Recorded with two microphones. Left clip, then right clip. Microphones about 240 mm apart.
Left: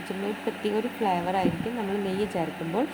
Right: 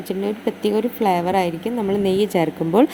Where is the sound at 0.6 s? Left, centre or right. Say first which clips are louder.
Right 8 dB; right.